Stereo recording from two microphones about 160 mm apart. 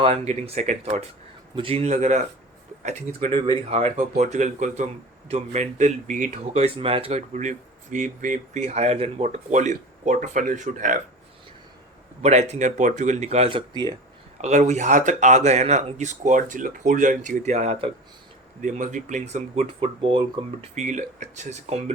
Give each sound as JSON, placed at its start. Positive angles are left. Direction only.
{"t": 0.0, "sound": "speech", "side_deg": -40}
{"t": 12.2, "sound": "speech", "side_deg": -45}
{"t": 14.4, "sound": "speech", "side_deg": -45}
{"t": 18.6, "sound": "speech", "side_deg": -50}
{"t": 20.8, "sound": "speech", "side_deg": -50}